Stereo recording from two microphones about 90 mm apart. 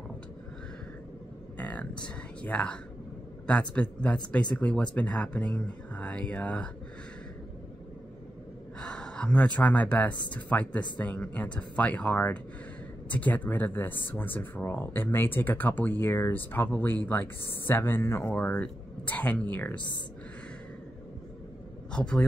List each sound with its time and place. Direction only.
1.6 s speech: 15° left (ahead or behind)
8.8 s speech: 10° left (ahead or behind)
21.9 s a man's voice: 10° left (ahead or behind)